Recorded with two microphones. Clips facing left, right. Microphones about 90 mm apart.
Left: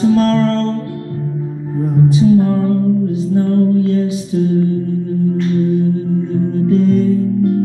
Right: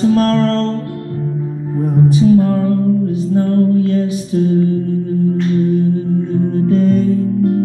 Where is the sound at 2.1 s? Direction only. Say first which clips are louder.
Even; 55° right (ahead or behind).